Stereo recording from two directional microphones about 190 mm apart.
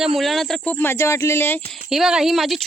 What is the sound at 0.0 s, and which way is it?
Speech, centre (ahead or behind).